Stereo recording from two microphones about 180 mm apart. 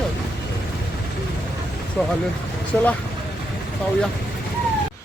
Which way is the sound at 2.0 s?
5° left (ahead or behind).